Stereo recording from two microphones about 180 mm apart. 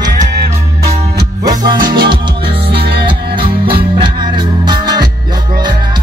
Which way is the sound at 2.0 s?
25° right (ahead or behind).